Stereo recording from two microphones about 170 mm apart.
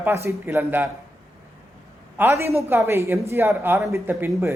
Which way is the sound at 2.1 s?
15° right (ahead or behind).